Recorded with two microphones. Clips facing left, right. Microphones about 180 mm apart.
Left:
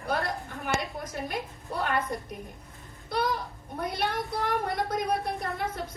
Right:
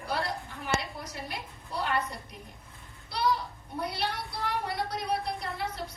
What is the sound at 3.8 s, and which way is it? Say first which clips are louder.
Speech: left 3 dB; 50° left (ahead or behind).